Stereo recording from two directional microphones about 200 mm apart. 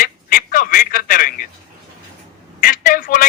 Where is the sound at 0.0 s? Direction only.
45° left (ahead or behind).